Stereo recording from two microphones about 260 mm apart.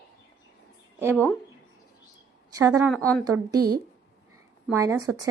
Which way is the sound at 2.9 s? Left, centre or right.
Centre.